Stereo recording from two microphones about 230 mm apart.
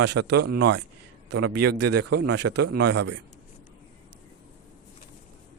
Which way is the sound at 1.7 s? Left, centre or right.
Right.